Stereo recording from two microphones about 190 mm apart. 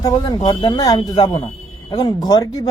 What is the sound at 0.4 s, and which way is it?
A man's voice, 20° left (ahead or behind).